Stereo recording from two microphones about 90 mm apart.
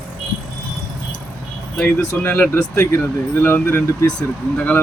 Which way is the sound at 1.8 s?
20° left (ahead or behind).